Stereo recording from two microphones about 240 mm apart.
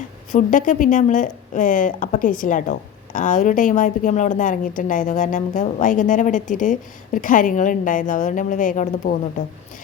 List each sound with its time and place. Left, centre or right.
0.3 s speech: left